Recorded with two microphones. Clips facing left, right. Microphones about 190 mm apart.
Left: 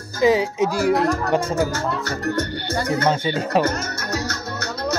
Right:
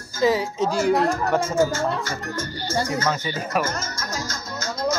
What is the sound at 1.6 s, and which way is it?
Speech, 65° left (ahead or behind).